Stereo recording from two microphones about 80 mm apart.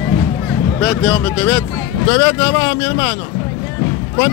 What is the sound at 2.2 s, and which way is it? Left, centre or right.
Speech, left.